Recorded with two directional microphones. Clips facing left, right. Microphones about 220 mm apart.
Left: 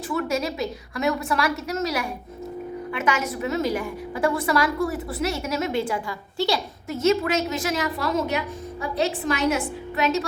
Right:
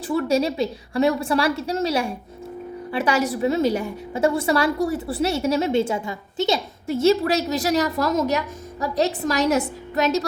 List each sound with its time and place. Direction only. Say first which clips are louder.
0.1 s a woman's voice: right 5 dB; 30° right (ahead or behind)